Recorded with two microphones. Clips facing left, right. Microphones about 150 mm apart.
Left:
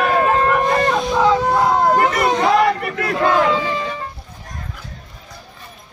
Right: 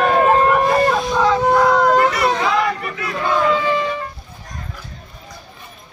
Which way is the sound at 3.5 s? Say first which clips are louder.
Right 2 dB; 35° left (ahead or behind).